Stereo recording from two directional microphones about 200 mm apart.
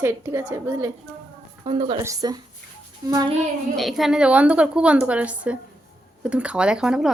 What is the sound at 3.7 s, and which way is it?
Speech, centre (ahead or behind).